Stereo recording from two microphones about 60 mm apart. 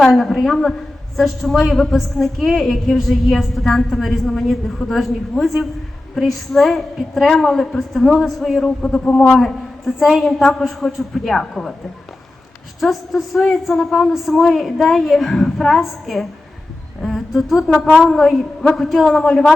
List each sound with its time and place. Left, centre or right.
0.0 s a woman's voice: centre
8.8 s a man's voice: centre
9.3 s a woman's voice: centre
12.8 s a woman's voice: centre